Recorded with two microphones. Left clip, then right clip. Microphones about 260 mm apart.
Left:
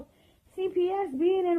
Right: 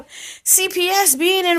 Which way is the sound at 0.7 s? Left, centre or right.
Centre.